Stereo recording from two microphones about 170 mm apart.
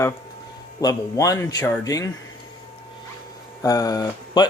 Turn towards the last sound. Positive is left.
turn(degrees=20)  # may be behind; listen again after turning